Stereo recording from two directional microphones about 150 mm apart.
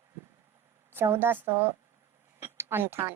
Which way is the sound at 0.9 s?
15° right (ahead or behind).